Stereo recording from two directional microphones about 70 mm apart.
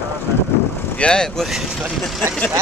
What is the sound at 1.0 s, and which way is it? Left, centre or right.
Speech, centre.